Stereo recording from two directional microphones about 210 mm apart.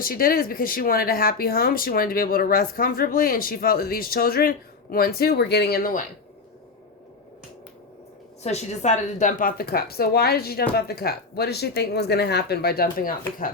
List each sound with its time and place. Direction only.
0.0 s speech: 45° left (ahead or behind)
8.4 s speech: 35° left (ahead or behind)